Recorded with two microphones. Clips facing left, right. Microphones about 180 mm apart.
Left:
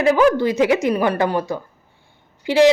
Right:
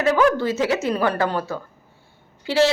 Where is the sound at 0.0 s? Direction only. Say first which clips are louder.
Left 3 dB; 10° left (ahead or behind).